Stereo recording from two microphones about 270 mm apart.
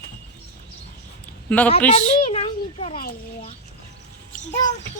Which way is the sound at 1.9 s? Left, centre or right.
Left.